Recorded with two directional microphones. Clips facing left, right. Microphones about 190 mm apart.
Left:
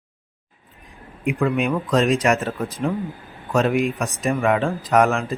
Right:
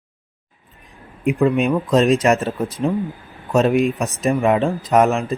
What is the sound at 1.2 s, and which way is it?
Speech, 25° right (ahead or behind).